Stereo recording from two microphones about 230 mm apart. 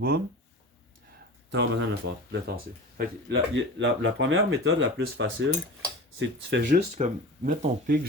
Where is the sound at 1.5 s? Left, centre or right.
Right.